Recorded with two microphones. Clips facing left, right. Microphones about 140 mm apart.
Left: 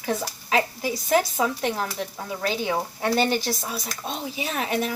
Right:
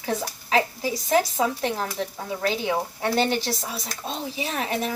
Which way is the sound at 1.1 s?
30° right (ahead or behind).